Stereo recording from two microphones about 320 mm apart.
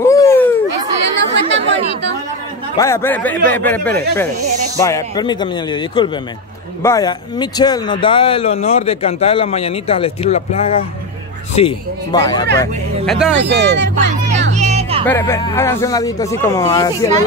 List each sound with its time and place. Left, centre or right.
0.0 s a sound: centre
2.8 s speech: centre
12.5 s speech: centre
13.4 s speech: right
14.5 s a sound: right
15.0 s speech: centre